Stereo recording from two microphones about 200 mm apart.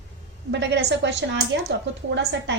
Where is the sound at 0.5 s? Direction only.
60° right (ahead or behind).